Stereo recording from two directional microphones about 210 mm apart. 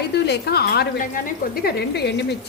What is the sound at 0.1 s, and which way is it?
A woman's voice, 50° left (ahead or behind).